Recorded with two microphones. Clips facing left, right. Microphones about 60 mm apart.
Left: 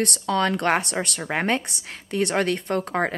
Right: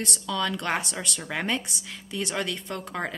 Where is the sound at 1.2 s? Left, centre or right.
Left.